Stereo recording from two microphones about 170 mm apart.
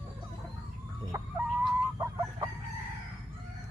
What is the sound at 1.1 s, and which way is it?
Chicken, 15° right (ahead or behind).